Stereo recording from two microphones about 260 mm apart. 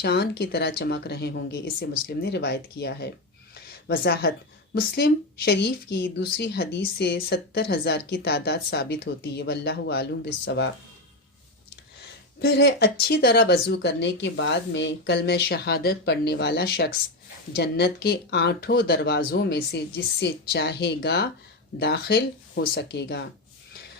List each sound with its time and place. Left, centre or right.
0.0 s speech: left
3.5 s a sound: left
4.7 s speech: left
12.4 s speech: left